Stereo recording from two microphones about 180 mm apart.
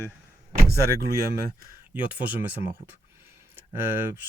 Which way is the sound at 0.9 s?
60° right (ahead or behind).